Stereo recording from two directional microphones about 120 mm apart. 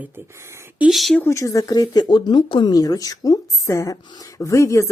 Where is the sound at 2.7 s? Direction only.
30° left (ahead or behind).